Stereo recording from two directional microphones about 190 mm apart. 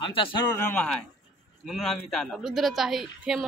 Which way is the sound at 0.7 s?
5° left (ahead or behind).